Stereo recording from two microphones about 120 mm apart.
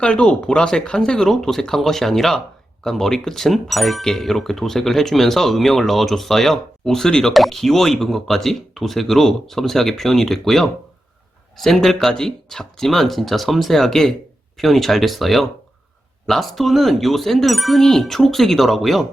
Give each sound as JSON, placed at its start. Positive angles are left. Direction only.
{"t": 0.0, "sound": "speech", "side_deg": 10}